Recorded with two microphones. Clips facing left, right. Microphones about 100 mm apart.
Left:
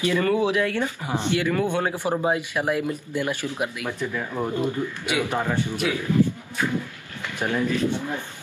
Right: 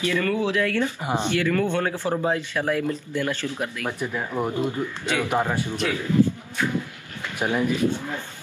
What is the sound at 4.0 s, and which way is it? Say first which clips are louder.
Speech: right 1 dB; 15° right (ahead or behind).